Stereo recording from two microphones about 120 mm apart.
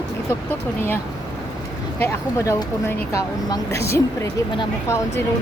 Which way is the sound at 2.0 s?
25° left (ahead or behind).